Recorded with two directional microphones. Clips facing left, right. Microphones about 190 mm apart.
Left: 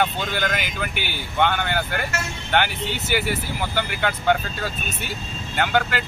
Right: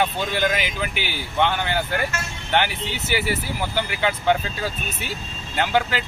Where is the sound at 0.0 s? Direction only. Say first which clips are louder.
Right 1 dB; 5° right (ahead or behind).